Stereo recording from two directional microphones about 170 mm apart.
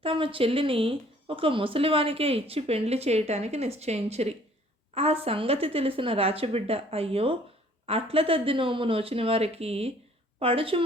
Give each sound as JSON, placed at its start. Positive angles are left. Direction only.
{"t": 0.0, "sound": "speech", "side_deg": -30}